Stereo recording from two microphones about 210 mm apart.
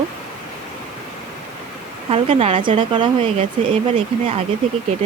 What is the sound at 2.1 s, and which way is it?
Speech, 25° right (ahead or behind).